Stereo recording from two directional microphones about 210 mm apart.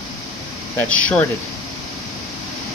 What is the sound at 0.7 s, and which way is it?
Speech, 5° left (ahead or behind).